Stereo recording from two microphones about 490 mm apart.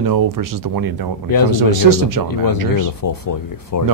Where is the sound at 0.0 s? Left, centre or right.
Right.